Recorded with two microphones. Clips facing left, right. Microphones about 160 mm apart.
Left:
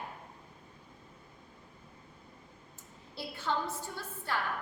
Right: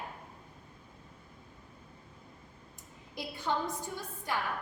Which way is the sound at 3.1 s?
15° right (ahead or behind).